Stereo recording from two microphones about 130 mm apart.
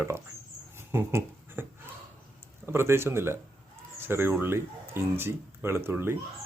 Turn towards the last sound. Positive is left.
turn(degrees=-20)  # may be behind; listen again after turning